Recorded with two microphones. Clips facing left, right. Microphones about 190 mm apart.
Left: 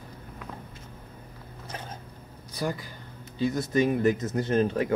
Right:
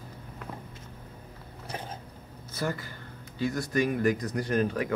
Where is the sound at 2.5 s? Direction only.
15° left (ahead or behind).